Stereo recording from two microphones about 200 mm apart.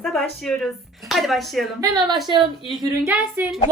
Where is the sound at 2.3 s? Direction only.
25° right (ahead or behind).